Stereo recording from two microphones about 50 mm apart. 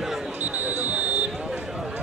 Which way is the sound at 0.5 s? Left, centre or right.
Right.